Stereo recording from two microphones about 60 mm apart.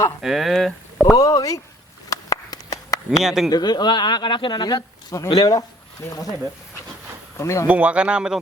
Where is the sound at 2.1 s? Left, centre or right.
Left.